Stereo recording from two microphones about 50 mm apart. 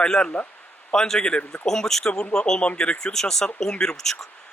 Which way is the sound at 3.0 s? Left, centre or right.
Centre.